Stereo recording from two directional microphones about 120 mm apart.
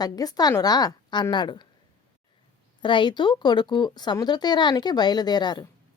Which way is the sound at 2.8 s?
40° left (ahead or behind).